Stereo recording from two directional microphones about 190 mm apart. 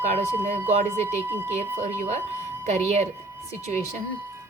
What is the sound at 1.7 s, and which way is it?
Speech, 35° right (ahead or behind).